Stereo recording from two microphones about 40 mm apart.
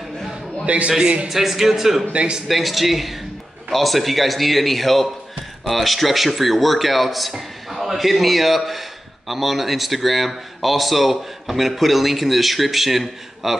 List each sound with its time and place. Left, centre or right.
0.7 s a man's voice: right
1.3 s speech: centre
2.1 s a man's voice: right
2.4 s speech: centre